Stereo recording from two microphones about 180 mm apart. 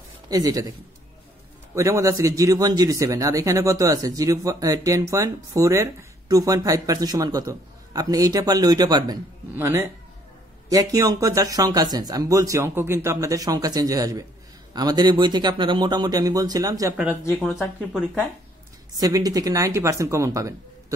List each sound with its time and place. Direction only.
0.3 s a man's voice: 20° right (ahead or behind)
1.8 s a man's voice: 15° right (ahead or behind)
16.9 s speech: 5° right (ahead or behind)
17.4 s speech: 5° left (ahead or behind)
18.9 s speech: 20° right (ahead or behind)